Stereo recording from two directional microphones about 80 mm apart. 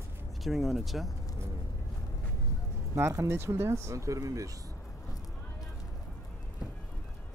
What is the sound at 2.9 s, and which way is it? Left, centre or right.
Speech, right.